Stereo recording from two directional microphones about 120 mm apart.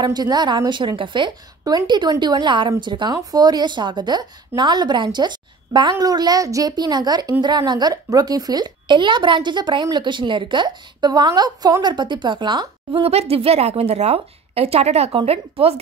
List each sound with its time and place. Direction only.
0.0 s a woman's voice: 35° right (ahead or behind)
1.6 s a woman's voice: 30° right (ahead or behind); by 15.7 s 55° right (ahead or behind)